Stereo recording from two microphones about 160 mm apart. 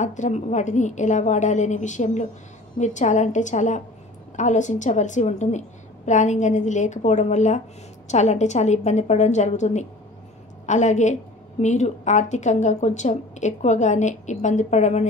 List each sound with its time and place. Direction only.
0.0 s a woman's voice: 50° left (ahead or behind)